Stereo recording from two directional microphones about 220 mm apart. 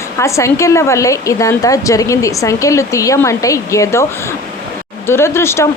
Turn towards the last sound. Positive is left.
turn(degrees=10)  # may be behind; listen again after turning